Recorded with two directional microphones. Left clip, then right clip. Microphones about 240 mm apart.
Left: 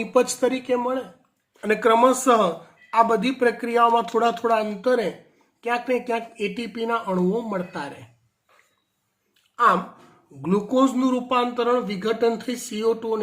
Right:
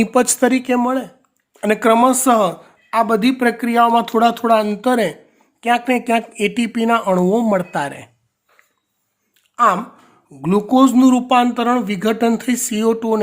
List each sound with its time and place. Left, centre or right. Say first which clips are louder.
0.0 s speech: right 5 dB; right
10.4 s speech: right 7 dB; right